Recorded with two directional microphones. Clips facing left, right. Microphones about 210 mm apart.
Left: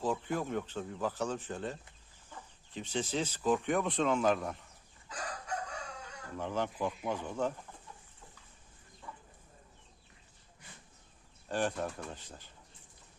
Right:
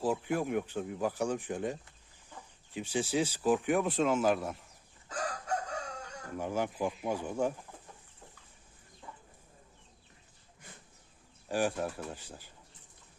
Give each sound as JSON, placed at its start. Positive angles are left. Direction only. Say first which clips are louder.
{"t": 0.0, "sound": "speech", "louder": "right 3 dB", "side_deg": -10}
{"t": 5.0, "sound": "chicken", "louder": "right 5 dB", "side_deg": -45}
{"t": 6.3, "sound": "speech", "louder": "right 2 dB", "side_deg": -10}
{"t": 9.0, "sound": "chicken", "louder": "even", "side_deg": -20}
{"t": 11.4, "sound": "speech", "louder": "right 2 dB", "side_deg": -10}